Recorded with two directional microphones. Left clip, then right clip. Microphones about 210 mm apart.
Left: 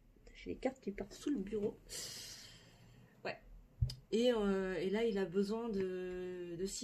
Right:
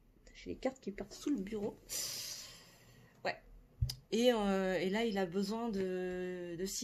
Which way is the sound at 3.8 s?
40° right (ahead or behind).